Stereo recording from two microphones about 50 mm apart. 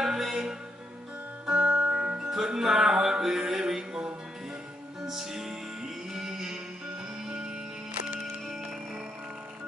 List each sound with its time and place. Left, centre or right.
0.0 s music: centre
1.4 s music: centre